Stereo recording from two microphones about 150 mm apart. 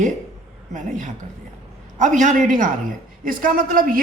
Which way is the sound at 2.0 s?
55° right (ahead or behind).